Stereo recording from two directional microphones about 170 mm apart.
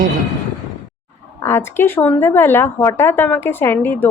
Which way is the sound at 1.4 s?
15° left (ahead or behind).